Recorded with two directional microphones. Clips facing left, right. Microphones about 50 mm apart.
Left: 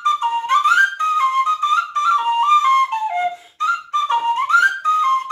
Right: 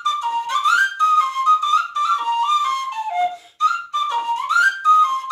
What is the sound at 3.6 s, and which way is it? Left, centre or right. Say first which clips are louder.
Music: even; left.